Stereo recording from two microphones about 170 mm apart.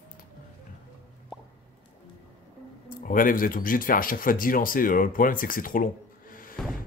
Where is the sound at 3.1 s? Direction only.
55° left (ahead or behind).